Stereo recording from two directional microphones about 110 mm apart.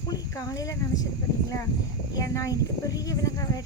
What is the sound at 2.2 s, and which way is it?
Speech, 30° left (ahead or behind).